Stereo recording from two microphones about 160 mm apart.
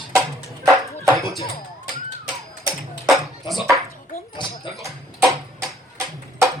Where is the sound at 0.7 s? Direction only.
20° right (ahead or behind).